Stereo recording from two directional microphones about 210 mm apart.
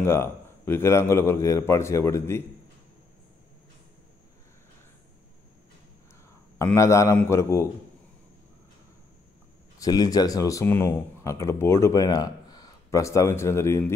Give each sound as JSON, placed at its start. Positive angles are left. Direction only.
{"t": 0.0, "sound": "speech", "side_deg": 10}
{"t": 6.6, "sound": "speech", "side_deg": 15}
{"t": 9.8, "sound": "speech", "side_deg": 15}